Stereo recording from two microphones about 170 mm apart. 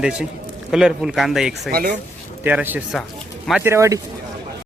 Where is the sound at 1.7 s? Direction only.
60° right (ahead or behind).